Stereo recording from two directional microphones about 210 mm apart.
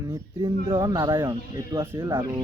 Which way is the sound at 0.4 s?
20° right (ahead or behind).